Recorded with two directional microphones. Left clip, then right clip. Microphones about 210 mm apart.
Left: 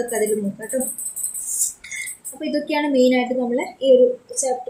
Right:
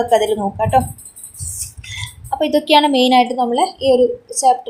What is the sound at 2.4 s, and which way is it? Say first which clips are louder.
Speech: right 10 dB; 40° right (ahead or behind).